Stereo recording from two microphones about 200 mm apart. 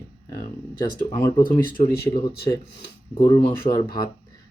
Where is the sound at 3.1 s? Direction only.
20° left (ahead or behind).